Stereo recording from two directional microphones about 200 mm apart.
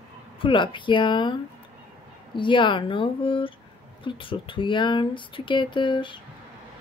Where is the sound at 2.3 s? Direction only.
25° left (ahead or behind).